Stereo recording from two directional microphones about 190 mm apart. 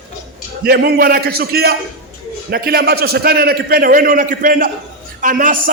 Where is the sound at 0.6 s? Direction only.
55° right (ahead or behind).